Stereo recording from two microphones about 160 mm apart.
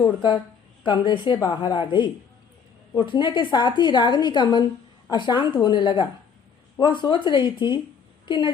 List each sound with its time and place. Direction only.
0.0 s a woman's voice: 30° left (ahead or behind)